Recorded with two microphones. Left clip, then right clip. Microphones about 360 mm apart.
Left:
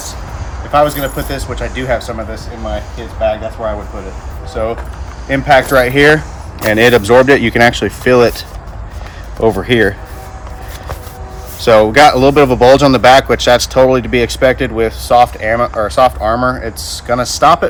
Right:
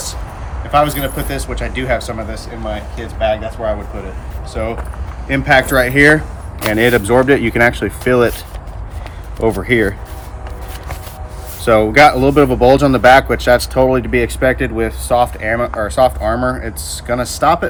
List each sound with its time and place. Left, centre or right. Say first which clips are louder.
0.7 s speech: left 2 dB; centre
9.6 s speech: left 1 dB; centre
11.6 s speech: left 3 dB; centre